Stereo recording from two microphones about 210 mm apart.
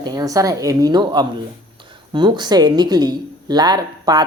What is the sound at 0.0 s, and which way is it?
A woman's voice, 20° right (ahead or behind).